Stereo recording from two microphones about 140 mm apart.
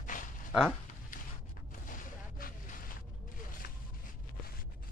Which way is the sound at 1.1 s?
75° left (ahead or behind).